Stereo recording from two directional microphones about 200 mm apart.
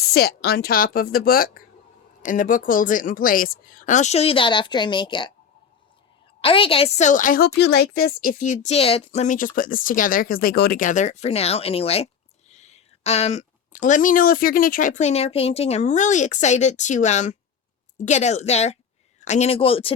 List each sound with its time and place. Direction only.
0.1 s a woman's voice: 50° left (ahead or behind); by 5.3 s 25° left (ahead or behind)
6.4 s a woman's voice: 25° left (ahead or behind)